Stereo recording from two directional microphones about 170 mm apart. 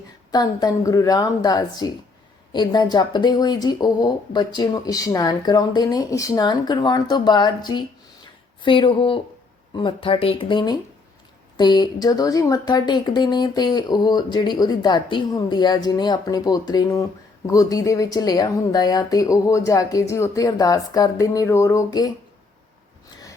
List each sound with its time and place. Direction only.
0.3 s speech: 25° left (ahead or behind)